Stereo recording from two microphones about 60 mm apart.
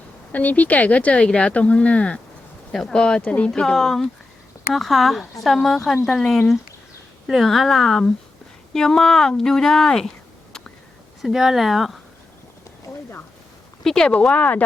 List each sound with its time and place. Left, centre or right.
0.3 s speech: left
3.2 s speech: left
3.5 s speech: centre
11.2 s speech: centre
13.8 s speech: centre